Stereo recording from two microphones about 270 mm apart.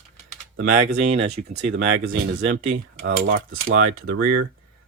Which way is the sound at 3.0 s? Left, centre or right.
Right.